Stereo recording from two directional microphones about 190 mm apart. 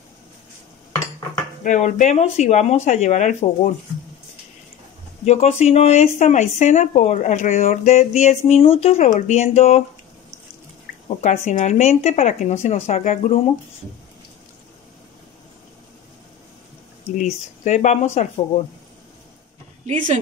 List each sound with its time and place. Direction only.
1.6 s speech: 40° left (ahead or behind)
5.2 s speech: 35° left (ahead or behind)
11.1 s speech: 35° left (ahead or behind)
17.2 s speech: 40° left (ahead or behind)